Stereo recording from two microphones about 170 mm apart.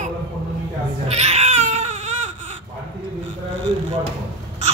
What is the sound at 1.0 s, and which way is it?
Baby cry, 40° right (ahead or behind).